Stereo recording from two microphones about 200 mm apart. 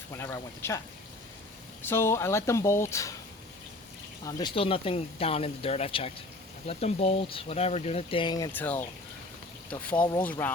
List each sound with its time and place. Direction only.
0.2 s speech: 15° left (ahead or behind)
1.8 s speech: 10° left (ahead or behind)
4.3 s speech: 20° left (ahead or behind)
8.5 s speech: 10° left (ahead or behind)